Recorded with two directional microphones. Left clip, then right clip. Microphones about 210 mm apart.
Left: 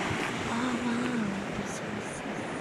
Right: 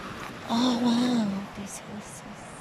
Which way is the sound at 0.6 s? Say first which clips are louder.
Right 10 dB; 20° right (ahead or behind).